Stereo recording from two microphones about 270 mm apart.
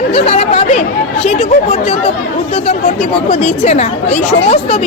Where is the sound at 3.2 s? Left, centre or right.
Left.